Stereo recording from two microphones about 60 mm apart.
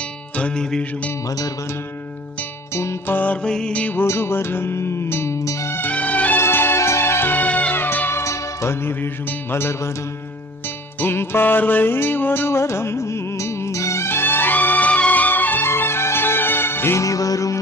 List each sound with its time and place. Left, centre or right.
0.3 s music: centre
2.7 s music: left
3.1 s music: left
3.4 s music: centre
3.7 s music: left
4.0 s music: left
5.9 s music: left
6.4 s music: left
7.8 s music: left
8.2 s music: left
11.0 s music: left
15.6 s music: left
17.0 s music: left